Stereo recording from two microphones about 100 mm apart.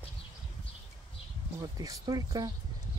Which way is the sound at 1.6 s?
40° right (ahead or behind).